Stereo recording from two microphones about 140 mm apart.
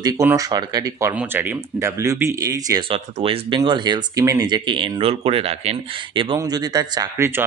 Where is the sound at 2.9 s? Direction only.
40° right (ahead or behind).